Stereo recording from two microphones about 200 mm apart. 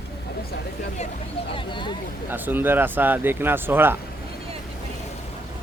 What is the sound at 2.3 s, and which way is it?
Speech, 10° right (ahead or behind).